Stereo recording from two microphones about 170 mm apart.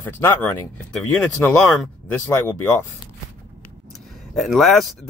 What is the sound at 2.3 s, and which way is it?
Speech, 15° left (ahead or behind).